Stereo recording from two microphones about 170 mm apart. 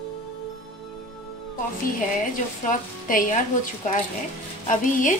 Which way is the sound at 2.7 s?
50° left (ahead or behind).